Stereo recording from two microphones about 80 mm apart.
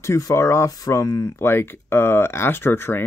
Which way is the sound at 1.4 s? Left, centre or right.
Left.